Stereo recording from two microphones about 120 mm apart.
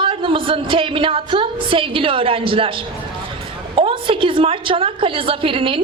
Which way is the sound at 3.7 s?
50° right (ahead or behind).